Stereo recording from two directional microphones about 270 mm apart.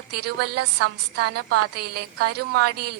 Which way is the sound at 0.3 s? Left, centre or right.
Right.